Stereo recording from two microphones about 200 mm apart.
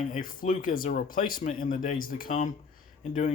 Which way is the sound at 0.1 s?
45° left (ahead or behind).